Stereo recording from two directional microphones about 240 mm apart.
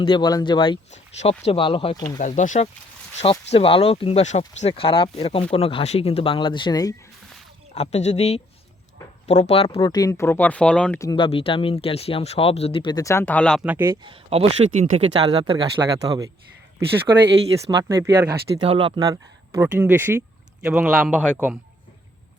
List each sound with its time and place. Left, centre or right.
0.0 s speech: centre
7.7 s speech: left; by 14.1 s centre
14.1 s speech: right
18.6 s speech: right; by 21.6 s centre